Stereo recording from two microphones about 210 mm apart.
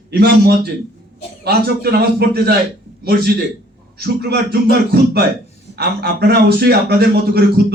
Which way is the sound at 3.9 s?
50° right (ahead or behind).